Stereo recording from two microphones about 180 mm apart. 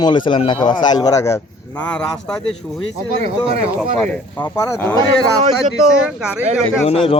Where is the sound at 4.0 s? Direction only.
10° left (ahead or behind).